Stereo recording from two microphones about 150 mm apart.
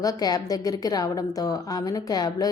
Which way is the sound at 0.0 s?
25° left (ahead or behind).